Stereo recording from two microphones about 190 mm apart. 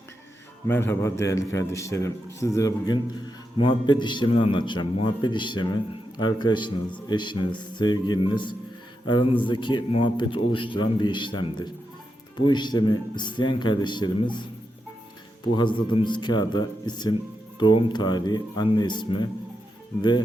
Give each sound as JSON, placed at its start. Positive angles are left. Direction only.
{"t": 0.7, "sound": "a man's voice", "side_deg": 10}
{"t": 15.5, "sound": "a man's voice", "side_deg": 25}